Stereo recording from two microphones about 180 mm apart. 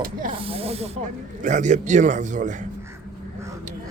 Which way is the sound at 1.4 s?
45° right (ahead or behind).